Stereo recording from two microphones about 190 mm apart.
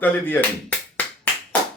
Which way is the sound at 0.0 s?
10° left (ahead or behind).